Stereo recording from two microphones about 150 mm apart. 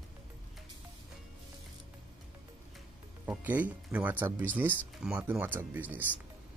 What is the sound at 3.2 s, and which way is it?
Speech, 10° right (ahead or behind).